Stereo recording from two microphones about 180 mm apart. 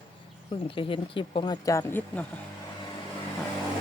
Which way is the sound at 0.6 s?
30° left (ahead or behind).